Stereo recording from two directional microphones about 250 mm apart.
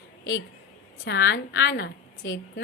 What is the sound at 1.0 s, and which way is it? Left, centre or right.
A woman's voice, left.